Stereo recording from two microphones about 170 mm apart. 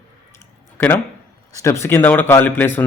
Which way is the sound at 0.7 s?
10° left (ahead or behind).